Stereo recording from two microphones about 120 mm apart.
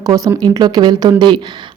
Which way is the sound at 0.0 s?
30° right (ahead or behind).